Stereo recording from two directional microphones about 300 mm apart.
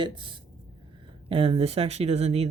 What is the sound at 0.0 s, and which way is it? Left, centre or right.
Speech, centre.